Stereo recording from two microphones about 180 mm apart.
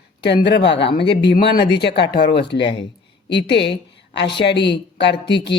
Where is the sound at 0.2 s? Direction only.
70° left (ahead or behind).